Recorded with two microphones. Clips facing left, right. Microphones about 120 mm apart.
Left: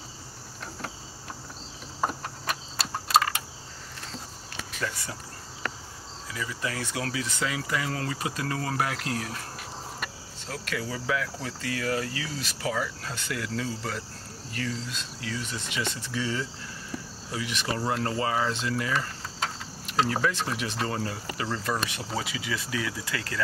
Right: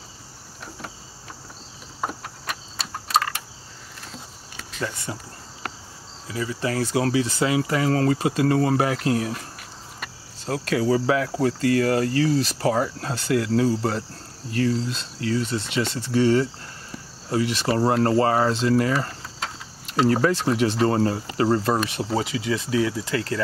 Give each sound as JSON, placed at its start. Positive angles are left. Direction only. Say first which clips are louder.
{"t": 2.0, "sound": "a sound", "louder": "even", "side_deg": 0}
{"t": 4.7, "sound": "speech", "louder": "right 4 dB", "side_deg": -30}
{"t": 6.2, "sound": "cricket", "louder": "right 7 dB", "side_deg": -30}
{"t": 10.4, "sound": "cricket", "louder": "right 11 dB", "side_deg": -40}
{"t": 17.3, "sound": "speech", "louder": "right 9 dB", "side_deg": -35}
{"t": 20.1, "sound": "cricket", "louder": "right 8 dB", "side_deg": -40}
{"t": 20.8, "sound": "speech", "louder": "right 10 dB", "side_deg": -40}